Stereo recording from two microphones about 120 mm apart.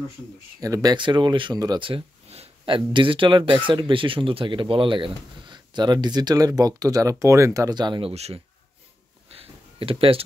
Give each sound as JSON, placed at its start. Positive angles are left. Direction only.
{"t": 0.8, "sound": "speech", "side_deg": -40}
{"t": 1.9, "sound": "speech", "side_deg": -55}
{"t": 8.1, "sound": "speech", "side_deg": -60}
{"t": 9.4, "sound": "a sound", "side_deg": -50}